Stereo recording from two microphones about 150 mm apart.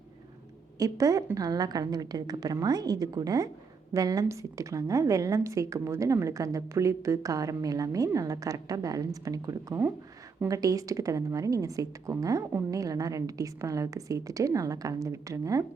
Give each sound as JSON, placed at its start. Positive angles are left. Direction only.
{"t": 0.8, "sound": "a woman's voice", "side_deg": -20}